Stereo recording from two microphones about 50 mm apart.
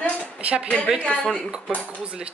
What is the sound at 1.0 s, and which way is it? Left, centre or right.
Speech, left.